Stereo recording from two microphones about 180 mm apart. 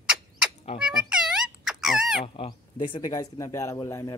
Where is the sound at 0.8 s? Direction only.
5° right (ahead or behind).